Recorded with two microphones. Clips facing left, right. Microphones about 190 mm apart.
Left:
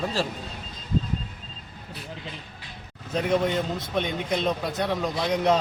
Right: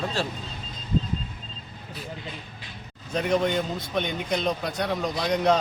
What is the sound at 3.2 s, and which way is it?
A man's voice, centre (ahead or behind).